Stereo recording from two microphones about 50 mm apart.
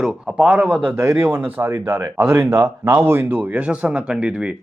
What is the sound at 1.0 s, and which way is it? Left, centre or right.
Speech, right.